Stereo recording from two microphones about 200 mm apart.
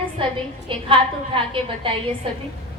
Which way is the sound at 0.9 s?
25° right (ahead or behind).